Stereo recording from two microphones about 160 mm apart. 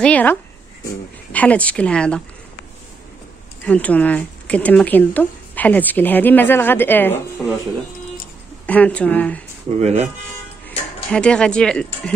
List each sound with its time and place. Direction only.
0.0 s speech: 10° left (ahead or behind)
3.6 s speech: 10° left (ahead or behind)
8.6 s speech: 10° left (ahead or behind)
9.8 s speech: 45° right (ahead or behind)
11.1 s speech: 5° left (ahead or behind)